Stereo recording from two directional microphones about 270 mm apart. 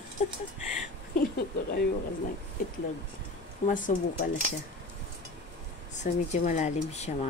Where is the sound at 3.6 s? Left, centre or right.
Left.